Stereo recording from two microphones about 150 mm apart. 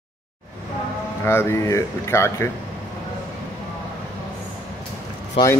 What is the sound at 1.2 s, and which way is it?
A man's voice, 15° left (ahead or behind).